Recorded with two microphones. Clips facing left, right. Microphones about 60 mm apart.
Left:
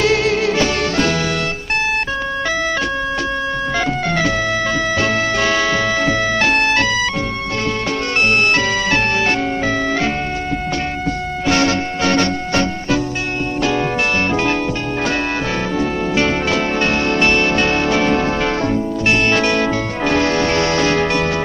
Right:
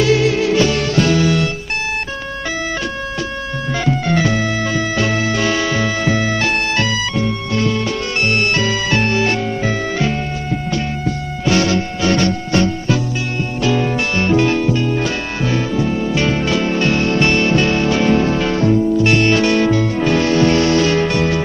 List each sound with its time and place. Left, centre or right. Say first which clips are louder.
0.0 s music: right 1 dB; left
5.4 s music: left 1 dB; left
5.7 s music: left 1 dB; centre
8.3 s music: left 1 dB; left
11.4 s music: right 1 dB; left
16.1 s music: left 2 dB; left